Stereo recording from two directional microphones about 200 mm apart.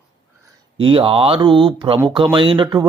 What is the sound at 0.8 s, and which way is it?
Speech, 25° right (ahead or behind).